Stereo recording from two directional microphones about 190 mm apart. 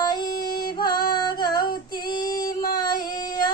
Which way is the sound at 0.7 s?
20° left (ahead or behind).